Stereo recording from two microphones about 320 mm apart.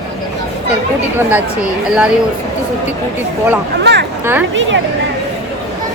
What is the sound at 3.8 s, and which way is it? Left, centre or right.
Speech, right.